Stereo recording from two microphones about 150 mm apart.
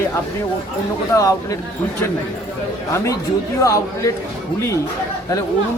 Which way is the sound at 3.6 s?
20° left (ahead or behind).